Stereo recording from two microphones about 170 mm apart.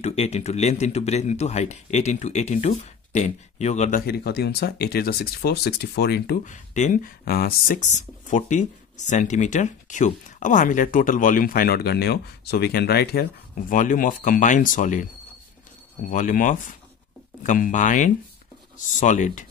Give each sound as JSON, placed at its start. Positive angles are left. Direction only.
{"t": 0.0, "sound": "speech", "side_deg": 40}
{"t": 4.0, "sound": "speech", "side_deg": 65}
{"t": 6.4, "sound": "speech", "side_deg": 45}
{"t": 16.1, "sound": "speech", "side_deg": 50}